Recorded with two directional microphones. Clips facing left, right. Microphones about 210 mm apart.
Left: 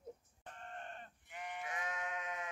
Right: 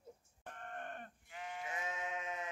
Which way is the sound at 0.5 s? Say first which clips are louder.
Right 2 dB; 55° right (ahead or behind).